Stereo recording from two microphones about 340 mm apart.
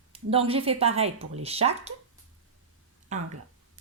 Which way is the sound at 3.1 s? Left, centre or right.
Right.